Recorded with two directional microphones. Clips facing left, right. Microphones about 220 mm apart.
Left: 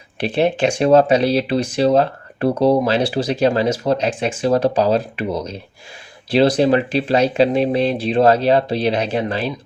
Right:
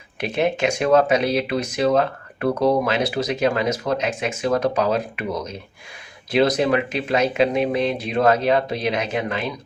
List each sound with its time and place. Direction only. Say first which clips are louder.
0.2 s speech: left 4 dB; 30° left (ahead or behind)